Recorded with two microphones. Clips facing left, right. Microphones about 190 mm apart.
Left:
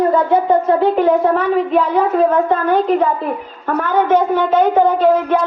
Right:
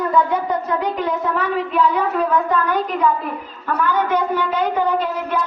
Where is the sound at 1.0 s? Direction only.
45° left (ahead or behind).